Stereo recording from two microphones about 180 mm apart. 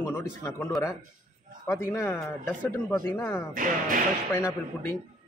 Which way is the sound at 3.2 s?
15° left (ahead or behind).